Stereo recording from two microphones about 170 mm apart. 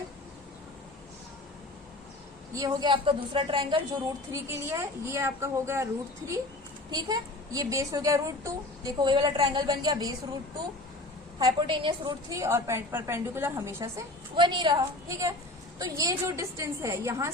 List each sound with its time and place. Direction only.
2.5 s a woman's voice: 20° right (ahead or behind)
4.3 s a woman's voice: 15° right (ahead or behind)
11.3 s a woman's voice: 25° right (ahead or behind)
14.3 s a woman's voice: 25° right (ahead or behind)